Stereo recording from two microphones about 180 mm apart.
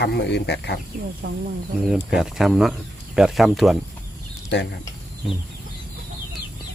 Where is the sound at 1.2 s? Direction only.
60° right (ahead or behind).